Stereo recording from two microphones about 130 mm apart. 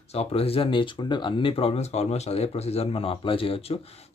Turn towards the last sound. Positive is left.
turn(degrees=50)  # may be behind; listen again after turning